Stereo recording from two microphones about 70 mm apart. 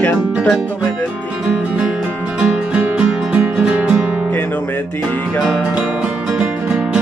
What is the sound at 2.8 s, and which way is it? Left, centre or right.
Music, centre.